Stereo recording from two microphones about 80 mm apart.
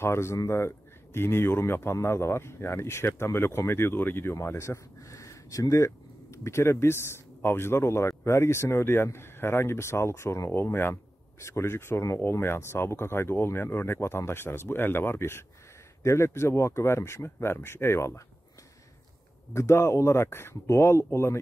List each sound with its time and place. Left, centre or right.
0.0 s a man's voice: left
19.5 s a man's voice: left